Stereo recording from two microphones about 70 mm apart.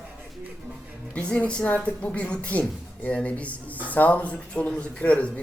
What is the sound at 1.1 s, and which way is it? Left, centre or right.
A man's voice, centre.